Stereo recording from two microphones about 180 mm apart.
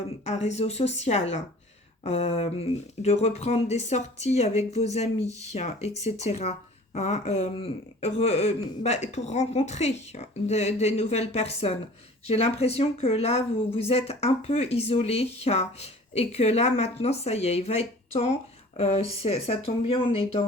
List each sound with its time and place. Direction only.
0.3 s speech: 35° left (ahead or behind)